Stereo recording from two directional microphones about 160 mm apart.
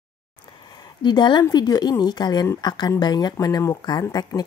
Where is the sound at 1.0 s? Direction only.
30° left (ahead or behind).